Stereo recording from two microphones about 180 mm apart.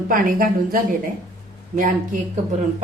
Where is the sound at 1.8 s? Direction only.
50° right (ahead or behind).